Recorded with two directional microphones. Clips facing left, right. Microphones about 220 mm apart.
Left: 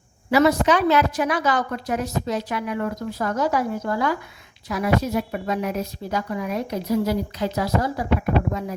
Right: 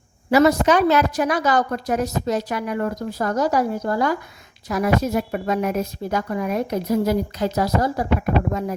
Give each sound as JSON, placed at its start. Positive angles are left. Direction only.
{"t": 0.3, "sound": "a woman's voice", "side_deg": -45}